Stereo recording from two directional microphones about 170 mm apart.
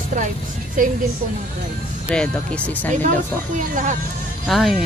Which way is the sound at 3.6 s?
50° right (ahead or behind).